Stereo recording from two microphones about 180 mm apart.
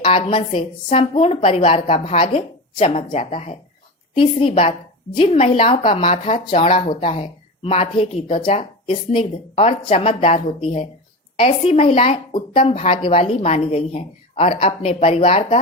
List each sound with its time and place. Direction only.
0.0 s a woman's voice: 30° left (ahead or behind)